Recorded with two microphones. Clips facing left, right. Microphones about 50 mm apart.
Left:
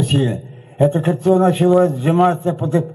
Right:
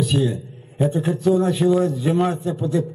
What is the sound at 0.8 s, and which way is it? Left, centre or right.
A man's voice, left.